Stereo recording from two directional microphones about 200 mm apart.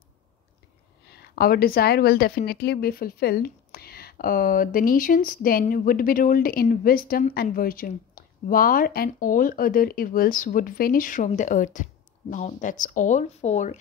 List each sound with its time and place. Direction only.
1.0 s a woman's voice: 50° left (ahead or behind); by 13.7 s 35° left (ahead or behind)